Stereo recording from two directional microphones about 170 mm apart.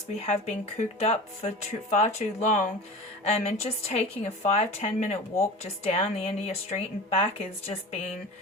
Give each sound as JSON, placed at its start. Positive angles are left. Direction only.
{"t": 0.1, "sound": "a woman's voice", "side_deg": 40}